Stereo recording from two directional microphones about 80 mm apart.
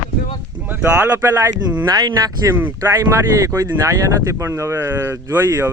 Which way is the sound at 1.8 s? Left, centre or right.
Right.